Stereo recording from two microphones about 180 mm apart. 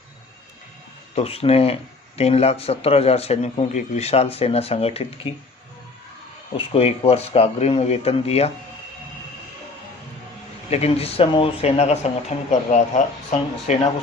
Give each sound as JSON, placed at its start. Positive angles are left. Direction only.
{"t": 1.1, "sound": "speech", "side_deg": 35}
{"t": 6.6, "sound": "speech", "side_deg": 30}
{"t": 10.7, "sound": "speech", "side_deg": 35}